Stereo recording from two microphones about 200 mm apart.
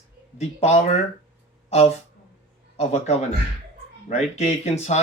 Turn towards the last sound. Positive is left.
turn(degrees=35)  # may be behind; listen again after turning